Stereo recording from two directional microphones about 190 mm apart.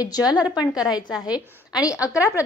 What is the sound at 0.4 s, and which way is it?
A woman's voice, 5° right (ahead or behind).